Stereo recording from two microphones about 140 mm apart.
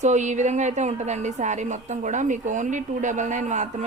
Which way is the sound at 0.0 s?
55° right (ahead or behind).